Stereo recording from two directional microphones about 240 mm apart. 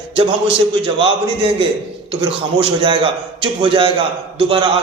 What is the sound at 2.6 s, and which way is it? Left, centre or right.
A man's voice, right.